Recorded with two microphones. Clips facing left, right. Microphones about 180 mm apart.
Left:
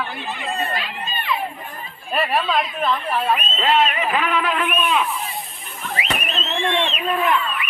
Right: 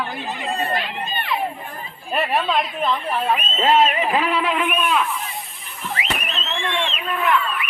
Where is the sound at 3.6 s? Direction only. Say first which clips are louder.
Right 3 dB; 35° right (ahead or behind).